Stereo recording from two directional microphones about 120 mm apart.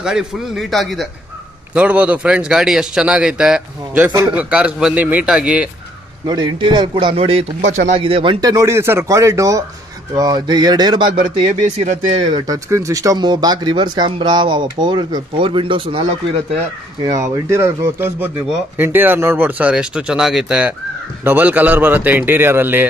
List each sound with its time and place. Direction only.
0.0 s a man's voice: 5° right (ahead or behind)
1.7 s a man's voice: 10° right (ahead or behind)
6.2 s speech: 40° right (ahead or behind)
7.2 s a man's voice: 55° right (ahead or behind)
8.4 s speech: 30° right (ahead or behind)
12.4 s speech: 25° right (ahead or behind); by 16.0 s 45° right (ahead or behind)
17.0 s a man's voice: 30° right (ahead or behind)